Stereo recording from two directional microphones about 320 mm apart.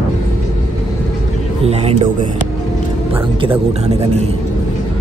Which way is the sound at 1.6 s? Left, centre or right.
Centre.